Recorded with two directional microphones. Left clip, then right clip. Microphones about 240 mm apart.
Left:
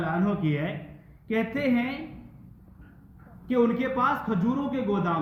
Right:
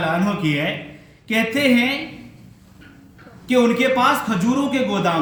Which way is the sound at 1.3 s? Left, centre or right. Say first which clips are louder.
Right 9 dB; right.